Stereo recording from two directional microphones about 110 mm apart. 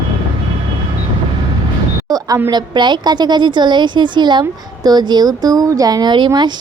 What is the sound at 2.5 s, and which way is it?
A woman's voice, 45° right (ahead or behind).